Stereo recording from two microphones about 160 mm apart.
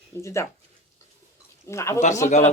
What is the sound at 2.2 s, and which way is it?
Speech, 50° left (ahead or behind).